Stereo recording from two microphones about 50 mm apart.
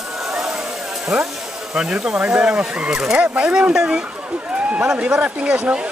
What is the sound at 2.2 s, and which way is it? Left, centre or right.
Speech, right.